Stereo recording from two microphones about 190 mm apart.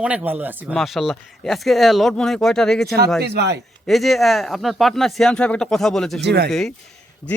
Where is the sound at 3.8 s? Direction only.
Centre (ahead or behind).